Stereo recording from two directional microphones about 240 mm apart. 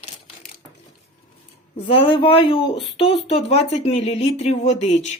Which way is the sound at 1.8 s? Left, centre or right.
Left.